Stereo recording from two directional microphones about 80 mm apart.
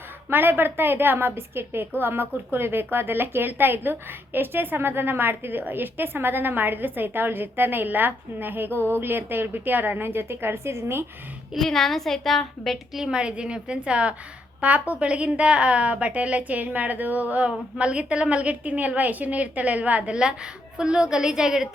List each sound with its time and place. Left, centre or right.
0.3 s a woman's voice: right
11.5 s a woman's voice: centre